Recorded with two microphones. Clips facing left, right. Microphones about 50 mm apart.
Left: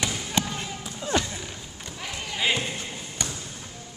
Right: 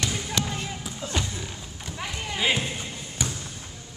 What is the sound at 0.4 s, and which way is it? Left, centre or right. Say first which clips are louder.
Basketball bounce: left 3 dB; left.